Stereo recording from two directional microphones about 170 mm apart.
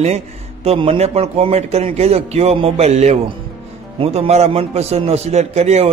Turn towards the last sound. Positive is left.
turn(degrees=-40)  # may be behind; listen again after turning